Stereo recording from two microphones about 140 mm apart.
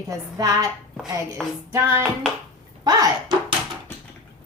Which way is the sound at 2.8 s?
30° right (ahead or behind).